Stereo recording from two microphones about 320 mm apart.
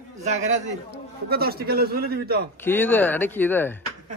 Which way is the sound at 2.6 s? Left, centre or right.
Centre.